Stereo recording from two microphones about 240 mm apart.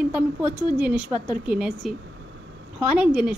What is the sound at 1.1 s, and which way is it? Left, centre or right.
Speech, centre.